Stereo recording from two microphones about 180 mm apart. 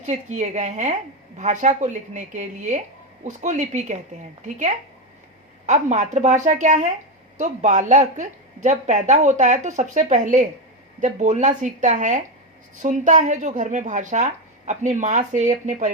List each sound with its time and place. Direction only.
0.0 s a woman's voice: 40° right (ahead or behind)